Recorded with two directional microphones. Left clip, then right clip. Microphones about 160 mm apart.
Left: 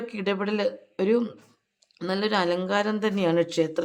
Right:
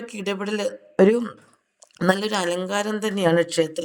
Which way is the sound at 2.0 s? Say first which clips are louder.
Right 3 dB; 35° right (ahead or behind).